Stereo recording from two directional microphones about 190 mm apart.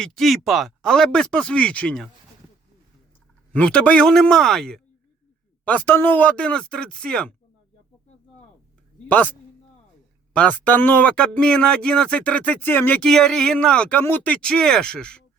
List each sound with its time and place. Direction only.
0.0 s speech: centre (ahead or behind)
3.5 s speech: 5° left (ahead or behind)
9.0 s speech: 10° left (ahead or behind)
10.3 s speech: 5° left (ahead or behind)